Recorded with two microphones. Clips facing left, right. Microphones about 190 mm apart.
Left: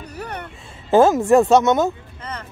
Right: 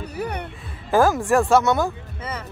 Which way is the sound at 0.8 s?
25° left (ahead or behind).